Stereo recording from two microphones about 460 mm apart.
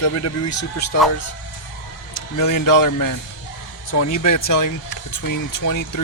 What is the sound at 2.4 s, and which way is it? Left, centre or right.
Speech, left.